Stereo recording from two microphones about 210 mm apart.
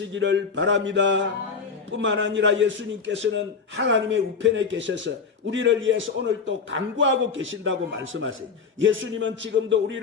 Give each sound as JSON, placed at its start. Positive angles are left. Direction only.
{"t": 0.1, "sound": "a man's voice", "side_deg": -60}